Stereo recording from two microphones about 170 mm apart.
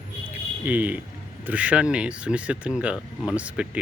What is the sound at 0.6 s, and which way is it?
Speech, 10° right (ahead or behind).